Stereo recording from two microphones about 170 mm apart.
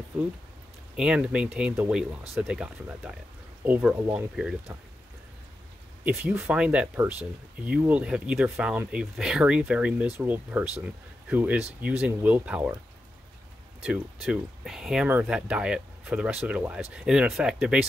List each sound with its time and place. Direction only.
0.1 s speech: 5° right (ahead or behind)
6.0 s speech: 5° right (ahead or behind)
13.8 s speech: 5° right (ahead or behind)